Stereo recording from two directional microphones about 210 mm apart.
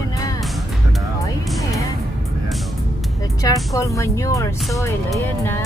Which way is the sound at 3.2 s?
15° left (ahead or behind).